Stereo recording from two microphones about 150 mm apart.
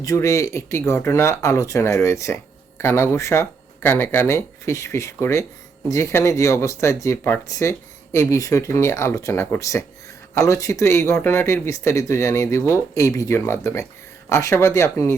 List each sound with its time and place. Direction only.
0.0 s speech: 20° left (ahead or behind)